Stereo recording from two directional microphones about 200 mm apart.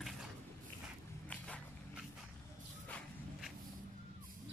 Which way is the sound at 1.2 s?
5° left (ahead or behind).